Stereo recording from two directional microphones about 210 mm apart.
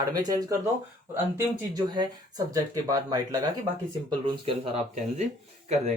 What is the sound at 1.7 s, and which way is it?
Speech, 20° right (ahead or behind).